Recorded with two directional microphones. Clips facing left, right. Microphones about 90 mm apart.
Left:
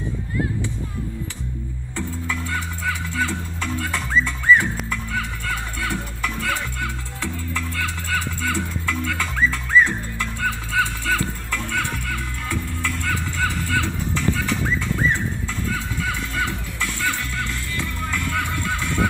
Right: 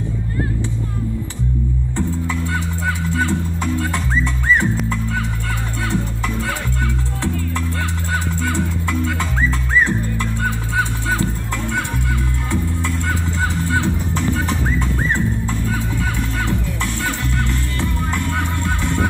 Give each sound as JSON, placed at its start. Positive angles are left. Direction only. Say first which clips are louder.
{"t": 2.0, "sound": "music", "louder": "right 4 dB", "side_deg": -25}
{"t": 5.9, "sound": "music", "louder": "right 5 dB", "side_deg": -25}
{"t": 15.7, "sound": "music", "louder": "right 4 dB", "side_deg": -35}